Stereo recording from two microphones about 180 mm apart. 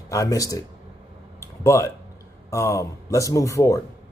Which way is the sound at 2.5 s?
15° left (ahead or behind).